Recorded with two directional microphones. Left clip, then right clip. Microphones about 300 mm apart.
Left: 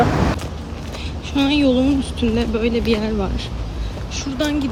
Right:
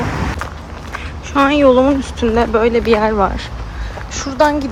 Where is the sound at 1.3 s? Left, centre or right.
Centre.